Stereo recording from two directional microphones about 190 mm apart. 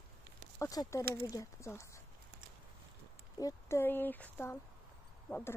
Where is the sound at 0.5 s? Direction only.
15° left (ahead or behind).